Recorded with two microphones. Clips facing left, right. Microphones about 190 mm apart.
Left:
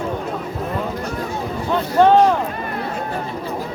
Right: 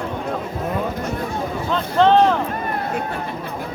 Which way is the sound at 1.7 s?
15° left (ahead or behind).